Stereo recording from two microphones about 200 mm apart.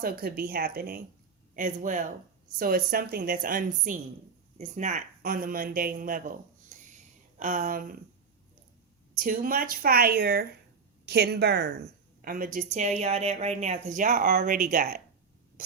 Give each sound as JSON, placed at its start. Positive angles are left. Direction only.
{"t": 0.0, "sound": "speech", "side_deg": -50}
{"t": 6.7, "sound": "a sound", "side_deg": -40}
{"t": 7.3, "sound": "speech", "side_deg": -40}
{"t": 9.1, "sound": "speech", "side_deg": -45}
{"t": 12.2, "sound": "speech", "side_deg": -45}